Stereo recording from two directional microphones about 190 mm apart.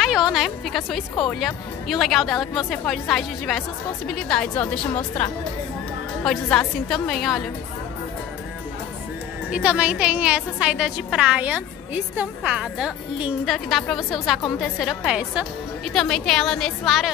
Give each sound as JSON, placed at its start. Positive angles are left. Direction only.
{"t": 0.0, "sound": "a woman's voice", "side_deg": 0}
{"t": 9.5, "sound": "a woman's voice", "side_deg": -5}